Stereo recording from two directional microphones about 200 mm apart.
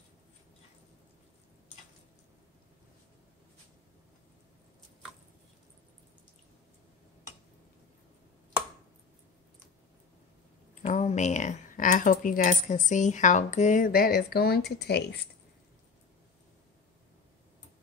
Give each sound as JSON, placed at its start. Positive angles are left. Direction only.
{"t": 10.7, "sound": "speech", "side_deg": 40}